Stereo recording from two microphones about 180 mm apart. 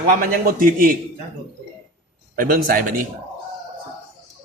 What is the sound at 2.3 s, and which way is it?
Speech, 50° right (ahead or behind).